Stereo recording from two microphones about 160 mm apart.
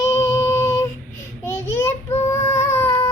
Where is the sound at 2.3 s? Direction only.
15° left (ahead or behind).